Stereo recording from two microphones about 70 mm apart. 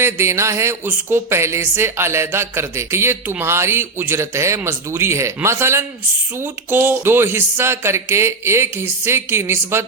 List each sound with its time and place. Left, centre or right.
0.0 s a woman's voice: right